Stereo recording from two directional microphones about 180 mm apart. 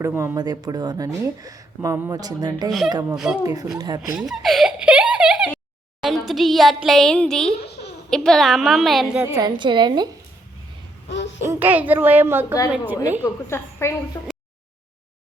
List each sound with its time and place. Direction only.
0.0 s a woman's voice: 15° right (ahead or behind)
4.2 s a sound: centre (ahead or behind)
6.0 s a woman's voice: centre (ahead or behind)
9.2 s a woman's voice: 15° right (ahead or behind)
9.6 s speech: 25° right (ahead or behind)
11.1 s a sound: 85° left
11.4 s a woman's voice: 10° right (ahead or behind)
13.2 s a woman's voice: 15° left (ahead or behind)